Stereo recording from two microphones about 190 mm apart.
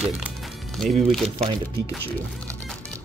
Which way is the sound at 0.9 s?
Centre (ahead or behind).